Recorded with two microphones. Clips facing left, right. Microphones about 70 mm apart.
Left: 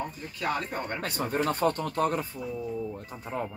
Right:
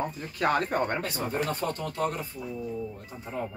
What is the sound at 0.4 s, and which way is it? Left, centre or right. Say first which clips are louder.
Speech: right 5 dB; right.